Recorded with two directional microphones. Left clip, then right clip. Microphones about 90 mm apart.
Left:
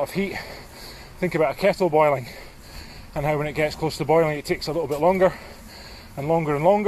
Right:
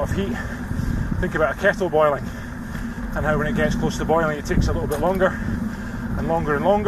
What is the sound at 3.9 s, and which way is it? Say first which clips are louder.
Speech: left 2 dB; 65° left (ahead or behind).